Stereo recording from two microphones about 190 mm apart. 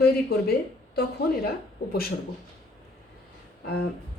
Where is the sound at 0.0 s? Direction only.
55° left (ahead or behind).